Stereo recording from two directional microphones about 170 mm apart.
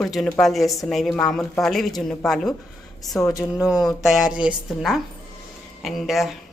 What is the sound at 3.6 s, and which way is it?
Speech, 5° right (ahead or behind).